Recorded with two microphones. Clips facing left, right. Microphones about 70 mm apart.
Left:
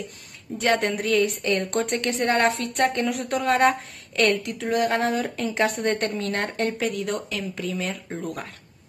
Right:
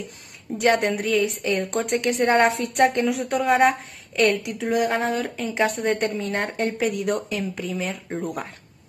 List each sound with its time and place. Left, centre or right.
0.6 s a woman's voice: centre
2.5 s a woman's voice: centre
3.0 s a woman's voice: centre
7.5 s a woman's voice: centre